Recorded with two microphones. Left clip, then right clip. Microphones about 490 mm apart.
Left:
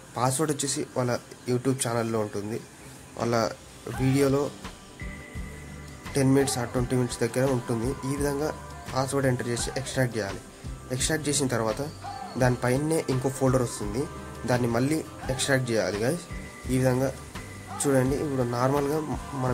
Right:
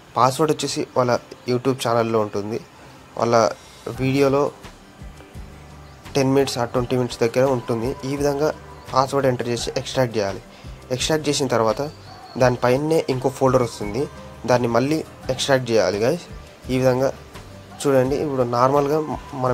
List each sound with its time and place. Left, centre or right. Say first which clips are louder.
0.1 s speech: right 9 dB; left
6.1 s speech: right 6 dB; left